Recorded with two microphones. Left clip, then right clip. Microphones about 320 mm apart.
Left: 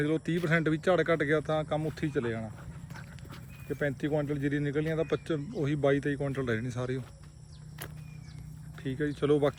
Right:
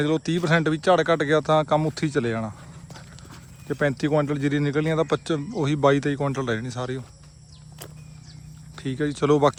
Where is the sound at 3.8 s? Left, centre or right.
Centre.